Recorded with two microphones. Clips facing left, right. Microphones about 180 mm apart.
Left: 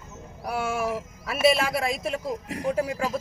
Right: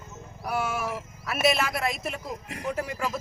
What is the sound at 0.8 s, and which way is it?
Speech, 35° left (ahead or behind).